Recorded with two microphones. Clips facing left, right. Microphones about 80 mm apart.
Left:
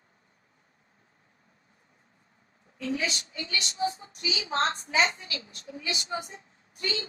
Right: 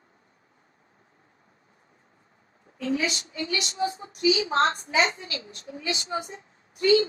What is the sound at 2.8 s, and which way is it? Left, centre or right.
A woman's voice, right.